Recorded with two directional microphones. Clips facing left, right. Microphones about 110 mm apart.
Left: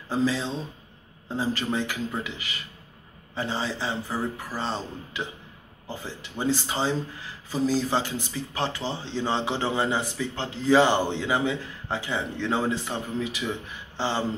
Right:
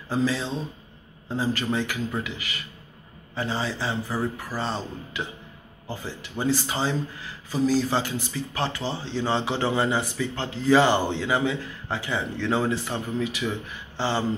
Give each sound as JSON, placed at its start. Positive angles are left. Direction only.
{"t": 0.1, "sound": "a man's voice", "side_deg": 25}
{"t": 6.4, "sound": "a man's voice", "side_deg": 25}